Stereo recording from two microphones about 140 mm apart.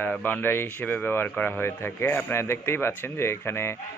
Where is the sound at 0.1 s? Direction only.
15° left (ahead or behind).